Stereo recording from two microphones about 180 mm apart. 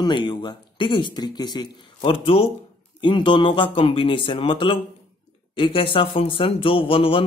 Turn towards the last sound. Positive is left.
turn(degrees=30)  # may be behind; listen again after turning